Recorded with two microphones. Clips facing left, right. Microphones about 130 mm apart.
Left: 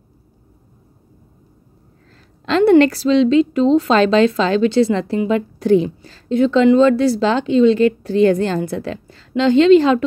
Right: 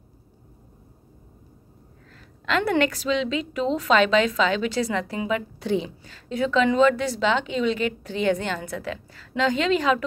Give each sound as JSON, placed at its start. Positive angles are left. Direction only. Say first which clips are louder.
{"t": 2.4, "sound": "a woman's voice", "louder": "left 11 dB", "side_deg": 30}
{"t": 5.6, "sound": "a woman's voice", "louder": "left 13 dB", "side_deg": 45}
{"t": 6.0, "sound": "a woman's voice", "louder": "left 10 dB", "side_deg": 30}